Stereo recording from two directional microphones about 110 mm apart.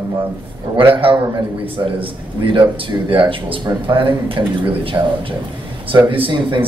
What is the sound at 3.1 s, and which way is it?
Speech, 55° right (ahead or behind).